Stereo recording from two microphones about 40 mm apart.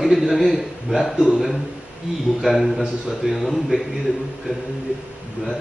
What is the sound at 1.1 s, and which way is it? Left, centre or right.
Speech, right.